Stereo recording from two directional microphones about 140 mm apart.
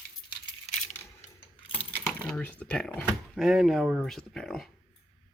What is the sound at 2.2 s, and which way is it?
Speech, 10° left (ahead or behind).